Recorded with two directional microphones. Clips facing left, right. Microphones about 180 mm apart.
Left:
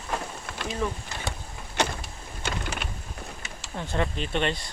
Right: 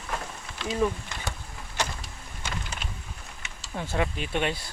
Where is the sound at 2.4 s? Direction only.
65° left (ahead or behind).